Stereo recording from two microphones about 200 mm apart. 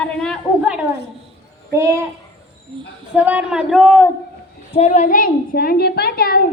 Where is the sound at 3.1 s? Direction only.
5° right (ahead or behind).